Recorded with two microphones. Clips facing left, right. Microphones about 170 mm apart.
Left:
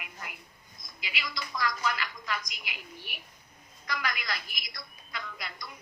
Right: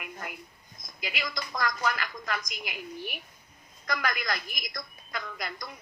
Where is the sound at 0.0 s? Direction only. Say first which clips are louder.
Right 5 dB; 45° right (ahead or behind).